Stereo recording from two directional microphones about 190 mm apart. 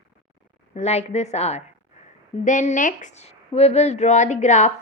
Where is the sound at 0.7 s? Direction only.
35° left (ahead or behind).